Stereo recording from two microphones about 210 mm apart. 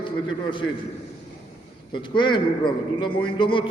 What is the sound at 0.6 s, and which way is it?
Speech, 90° left.